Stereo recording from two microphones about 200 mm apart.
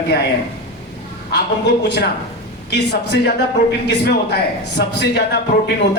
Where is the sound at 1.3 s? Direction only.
55° left (ahead or behind).